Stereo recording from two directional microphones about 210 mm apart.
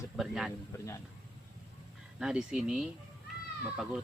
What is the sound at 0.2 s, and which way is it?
Speech, centre (ahead or behind).